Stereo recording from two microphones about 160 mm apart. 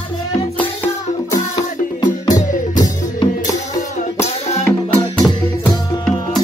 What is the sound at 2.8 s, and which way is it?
Music, 20° left (ahead or behind).